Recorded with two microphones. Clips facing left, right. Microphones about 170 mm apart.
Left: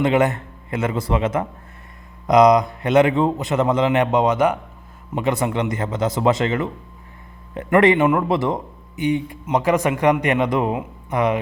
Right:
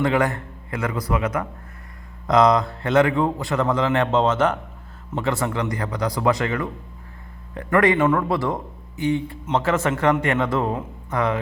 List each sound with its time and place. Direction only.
0.0 s a man's voice: 20° left (ahead or behind)